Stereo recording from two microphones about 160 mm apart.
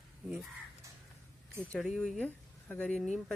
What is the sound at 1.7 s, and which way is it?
Speech, centre (ahead or behind).